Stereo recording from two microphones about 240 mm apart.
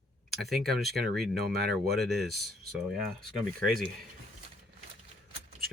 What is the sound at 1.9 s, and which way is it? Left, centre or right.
Speech, centre.